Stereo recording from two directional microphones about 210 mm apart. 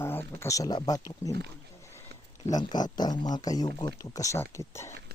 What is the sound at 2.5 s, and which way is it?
Speech, 20° left (ahead or behind).